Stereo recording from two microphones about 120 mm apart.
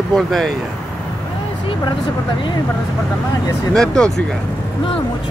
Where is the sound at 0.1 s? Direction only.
Centre (ahead or behind).